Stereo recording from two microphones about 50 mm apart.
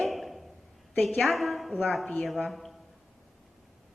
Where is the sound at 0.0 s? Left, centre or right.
Centre.